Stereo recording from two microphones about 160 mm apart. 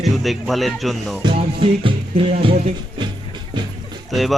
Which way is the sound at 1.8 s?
35° right (ahead or behind).